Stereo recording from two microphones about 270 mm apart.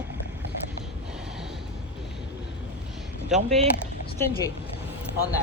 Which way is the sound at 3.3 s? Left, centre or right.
Centre.